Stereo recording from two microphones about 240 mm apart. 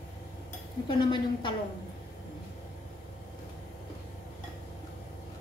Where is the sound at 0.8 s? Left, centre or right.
Centre.